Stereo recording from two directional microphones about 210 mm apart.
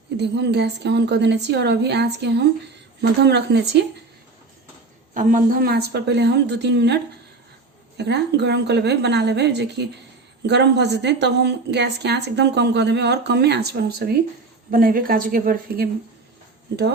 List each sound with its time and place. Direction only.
0.2 s a woman's voice: 55° right (ahead or behind)
5.1 s a woman's voice: 40° right (ahead or behind)